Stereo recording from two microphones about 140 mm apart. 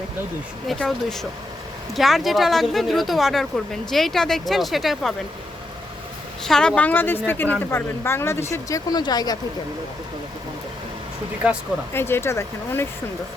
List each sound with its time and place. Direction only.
0.7 s speech: centre (ahead or behind)
6.4 s speech: 5° left (ahead or behind); by 9.4 s 30° left (ahead or behind)
11.9 s speech: 15° left (ahead or behind)